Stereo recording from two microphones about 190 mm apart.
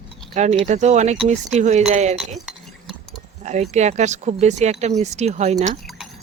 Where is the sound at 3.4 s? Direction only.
35° right (ahead or behind).